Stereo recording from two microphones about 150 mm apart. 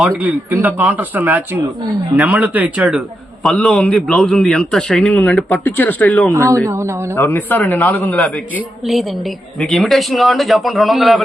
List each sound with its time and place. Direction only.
0.2 s a man's voice: 10° right (ahead or behind)
3.4 s a man's voice: 5° left (ahead or behind)
6.3 s a man's voice: 20° right (ahead or behind)
7.2 s a man's voice: 15° left (ahead or behind)
9.6 s a man's voice: 5° left (ahead or behind)